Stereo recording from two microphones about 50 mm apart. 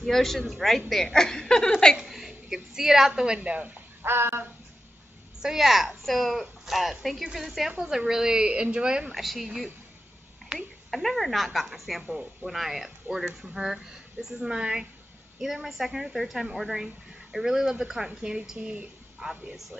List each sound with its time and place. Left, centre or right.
0.0 s a woman's voice: centre
2.0 s a woman's voice: centre
3.4 s speech: right
4.0 s speech: right
5.4 s a woman's voice: centre
7.7 s a woman's voice: centre
9.1 s a woman's voice: centre
10.5 s speech: right
10.9 s a woman's voice: centre; by 18.9 s right
19.1 s a woman's voice: centre